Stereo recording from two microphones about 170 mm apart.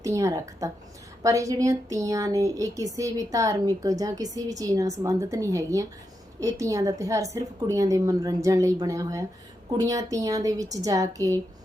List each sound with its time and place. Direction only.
0.0 s speech: 20° right (ahead or behind)